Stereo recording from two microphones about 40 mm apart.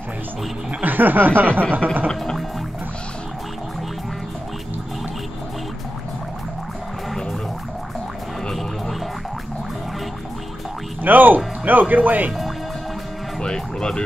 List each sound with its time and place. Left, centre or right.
0.8 s speech: right
11.0 s speech: right
13.4 s music: centre